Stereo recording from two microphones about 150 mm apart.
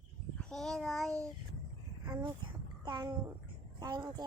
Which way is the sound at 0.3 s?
5° left (ahead or behind).